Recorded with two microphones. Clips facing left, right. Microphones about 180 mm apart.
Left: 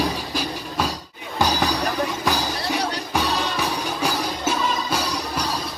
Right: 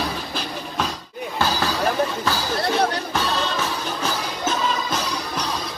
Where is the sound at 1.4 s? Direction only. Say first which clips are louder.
Left 2 dB; 15° left (ahead or behind).